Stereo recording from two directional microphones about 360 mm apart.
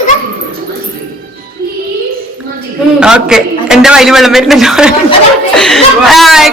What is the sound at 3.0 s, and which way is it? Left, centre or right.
A man's voice, centre.